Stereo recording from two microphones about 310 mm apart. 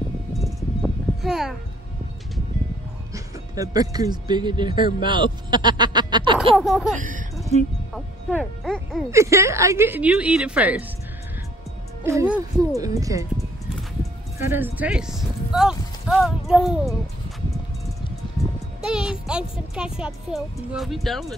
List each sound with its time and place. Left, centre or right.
0.3 s a sound: centre
1.2 s speech: centre
3.5 s speech: centre
6.6 s speech: centre
7.0 s speech: right
7.9 s speech: centre
12.0 s speech: centre
14.4 s speech: centre
18.8 s speech: centre